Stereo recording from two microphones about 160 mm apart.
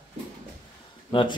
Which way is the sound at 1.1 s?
30° left (ahead or behind).